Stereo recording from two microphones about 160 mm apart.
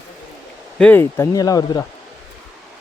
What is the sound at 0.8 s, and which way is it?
Speech, 10° left (ahead or behind).